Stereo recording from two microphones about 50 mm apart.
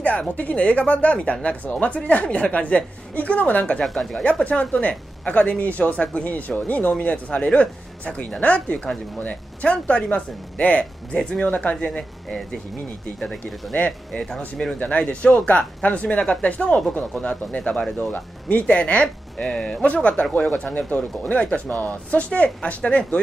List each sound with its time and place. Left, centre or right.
0.4 s speech: left
3.8 s speech: centre
4.5 s speech: left
11.7 s speech: centre
13.2 s speech: centre
13.7 s speech: left
14.3 s speech: centre
14.8 s speech: left